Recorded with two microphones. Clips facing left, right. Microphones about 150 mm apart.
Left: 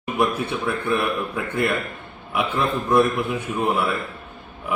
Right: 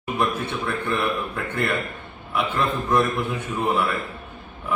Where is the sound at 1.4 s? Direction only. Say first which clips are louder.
Left 2 dB; 10° left (ahead or behind).